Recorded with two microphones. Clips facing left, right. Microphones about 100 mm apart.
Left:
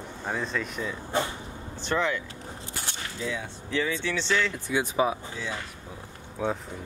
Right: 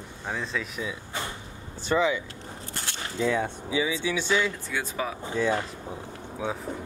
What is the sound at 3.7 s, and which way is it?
Speech, 10° right (ahead or behind).